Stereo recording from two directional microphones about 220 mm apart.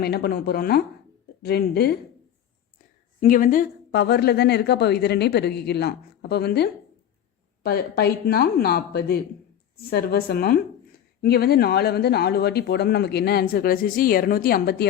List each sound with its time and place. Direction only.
0.0 s speech: 45° left (ahead or behind)
3.2 s speech: 35° left (ahead or behind)